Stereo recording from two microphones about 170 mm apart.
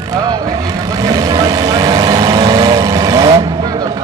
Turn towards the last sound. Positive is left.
turn(degrees=-20)  # may be behind; listen again after turning